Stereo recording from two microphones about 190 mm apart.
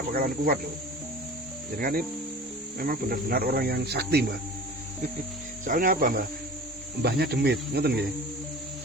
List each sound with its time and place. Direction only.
0.1 s speech: 50° right (ahead or behind)
1.7 s speech: 50° right (ahead or behind)
5.6 s speech: 45° right (ahead or behind)
7.0 s cricket: 55° right (ahead or behind)